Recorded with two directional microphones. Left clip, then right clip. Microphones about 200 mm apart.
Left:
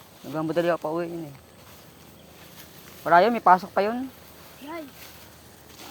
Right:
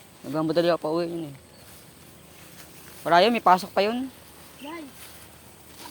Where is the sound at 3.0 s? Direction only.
20° right (ahead or behind).